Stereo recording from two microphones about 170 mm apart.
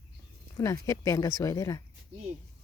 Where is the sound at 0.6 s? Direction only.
20° left (ahead or behind).